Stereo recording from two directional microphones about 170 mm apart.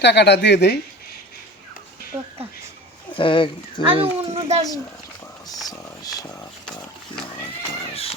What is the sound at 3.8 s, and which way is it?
Speech, 35° right (ahead or behind).